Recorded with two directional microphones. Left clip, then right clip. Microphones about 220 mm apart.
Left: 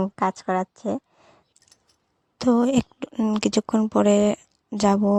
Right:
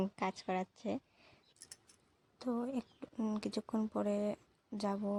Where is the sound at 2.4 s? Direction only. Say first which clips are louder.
Left 19 dB; 45° left (ahead or behind).